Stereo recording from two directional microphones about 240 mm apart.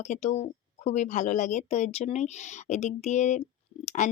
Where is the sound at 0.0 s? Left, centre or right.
Left.